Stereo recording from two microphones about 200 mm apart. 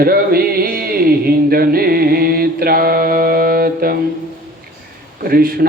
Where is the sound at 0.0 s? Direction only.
50° right (ahead or behind).